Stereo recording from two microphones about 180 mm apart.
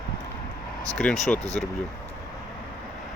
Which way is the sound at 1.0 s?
Centre (ahead or behind).